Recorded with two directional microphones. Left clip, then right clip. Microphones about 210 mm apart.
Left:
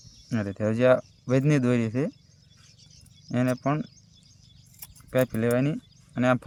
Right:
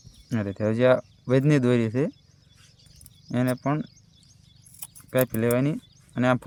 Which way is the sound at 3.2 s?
10° right (ahead or behind).